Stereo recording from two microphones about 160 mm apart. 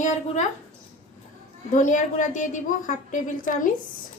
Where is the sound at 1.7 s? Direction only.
50° left (ahead or behind).